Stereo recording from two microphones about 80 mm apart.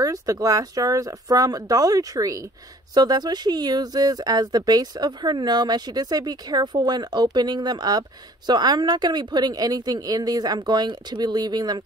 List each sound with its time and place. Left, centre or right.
0.0 s speech: right
2.9 s speech: right